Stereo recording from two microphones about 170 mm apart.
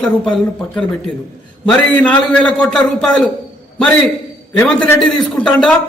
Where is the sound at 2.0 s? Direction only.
5° left (ahead or behind).